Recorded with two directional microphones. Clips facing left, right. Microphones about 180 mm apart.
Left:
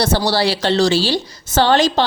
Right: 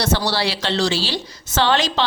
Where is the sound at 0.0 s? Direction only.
40° left (ahead or behind).